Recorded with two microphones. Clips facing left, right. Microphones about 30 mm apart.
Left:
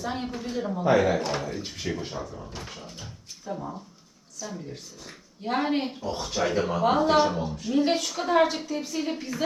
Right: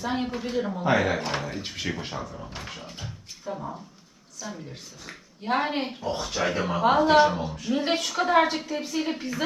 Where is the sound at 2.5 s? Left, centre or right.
Right.